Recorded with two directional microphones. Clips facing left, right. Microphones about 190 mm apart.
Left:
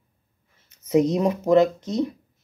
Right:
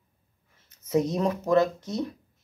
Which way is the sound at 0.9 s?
15° left (ahead or behind).